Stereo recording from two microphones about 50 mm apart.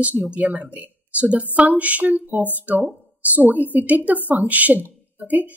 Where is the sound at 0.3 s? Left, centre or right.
Right.